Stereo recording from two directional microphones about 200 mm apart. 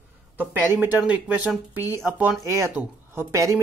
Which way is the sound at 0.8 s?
5° right (ahead or behind).